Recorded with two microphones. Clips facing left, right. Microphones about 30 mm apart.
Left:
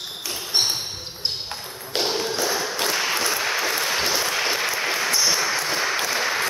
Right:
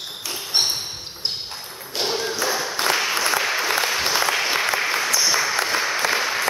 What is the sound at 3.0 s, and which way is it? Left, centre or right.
Applause, centre.